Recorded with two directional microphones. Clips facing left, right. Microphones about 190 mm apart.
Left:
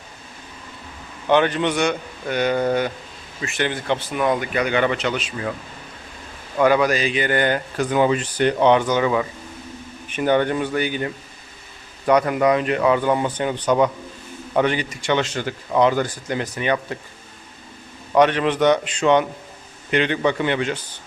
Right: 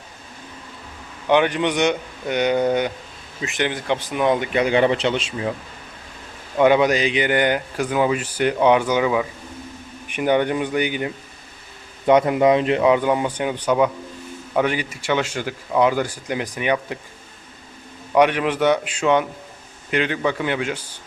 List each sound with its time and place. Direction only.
1.3 s speech: 15° right (ahead or behind)
6.6 s speech: 20° right (ahead or behind)
18.1 s speech: 10° right (ahead or behind)